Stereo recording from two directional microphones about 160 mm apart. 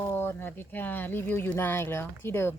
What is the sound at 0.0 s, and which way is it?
Speech, 15° left (ahead or behind).